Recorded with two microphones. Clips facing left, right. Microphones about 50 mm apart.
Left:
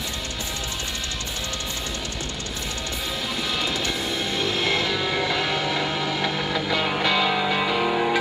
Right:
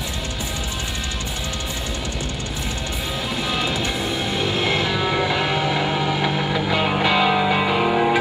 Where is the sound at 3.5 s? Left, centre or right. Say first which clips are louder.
Right 3 dB; centre.